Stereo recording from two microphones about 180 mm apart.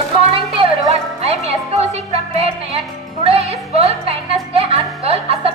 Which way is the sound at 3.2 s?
35° right (ahead or behind).